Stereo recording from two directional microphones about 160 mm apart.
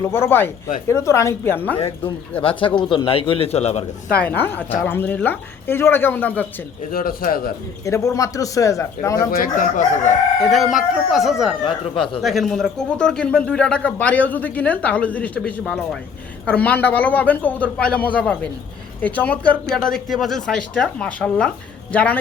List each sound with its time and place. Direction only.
0.0 s a man's voice: 15° left (ahead or behind)
2.4 s speech: 35° left (ahead or behind)
4.1 s a man's voice: 10° left (ahead or behind)
6.9 s chicken: 65° left (ahead or behind)
7.9 s a man's voice: 20° left (ahead or behind)
9.3 s chicken: 60° left (ahead or behind)
10.5 s speech: centre (ahead or behind)
11.6 s speech: 30° left (ahead or behind)
12.2 s a man's voice: centre (ahead or behind)